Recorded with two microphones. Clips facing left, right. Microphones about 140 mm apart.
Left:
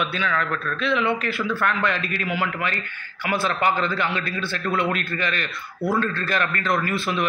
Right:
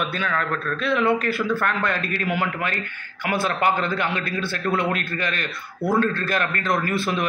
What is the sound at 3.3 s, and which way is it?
Speech, 50° right (ahead or behind).